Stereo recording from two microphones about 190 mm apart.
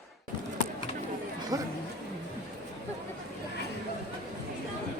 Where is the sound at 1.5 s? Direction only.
20° right (ahead or behind).